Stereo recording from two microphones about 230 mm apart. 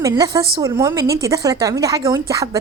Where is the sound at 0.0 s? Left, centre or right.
Centre.